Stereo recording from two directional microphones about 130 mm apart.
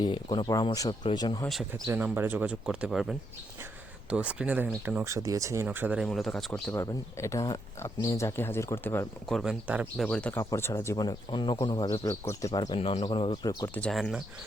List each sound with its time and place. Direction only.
0.0 s speech: 35° left (ahead or behind)
1.7 s speech: 15° right (ahead or behind)
5.0 s speech: 25° right (ahead or behind)
5.6 s speech: 10° right (ahead or behind)
6.1 s speech: centre (ahead or behind)
6.7 s speech: 20° left (ahead or behind)
9.3 s speech: 5° right (ahead or behind)
10.0 s speech: 10° left (ahead or behind)
10.4 s speech: 20° left (ahead or behind)
10.9 s speech: 30° left (ahead or behind)
13.9 s speech: centre (ahead or behind)